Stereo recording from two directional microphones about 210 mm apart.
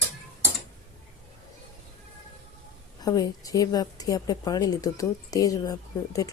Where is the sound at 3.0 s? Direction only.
15° left (ahead or behind).